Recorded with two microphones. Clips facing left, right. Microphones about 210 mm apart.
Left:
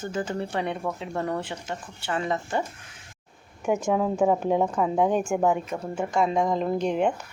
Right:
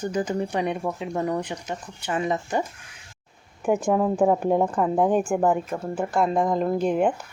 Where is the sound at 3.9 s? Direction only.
Centre (ahead or behind).